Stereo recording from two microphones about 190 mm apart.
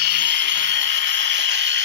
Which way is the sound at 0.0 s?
65° right (ahead or behind).